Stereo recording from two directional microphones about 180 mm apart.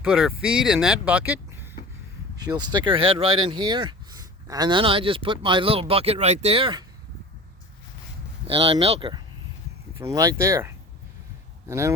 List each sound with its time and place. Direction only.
0.0 s speech: 5° right (ahead or behind)
2.3 s speech: 20° right (ahead or behind)
8.4 s speech: 30° right (ahead or behind)
10.0 s speech: 20° right (ahead or behind)
11.7 s speech: 15° right (ahead or behind)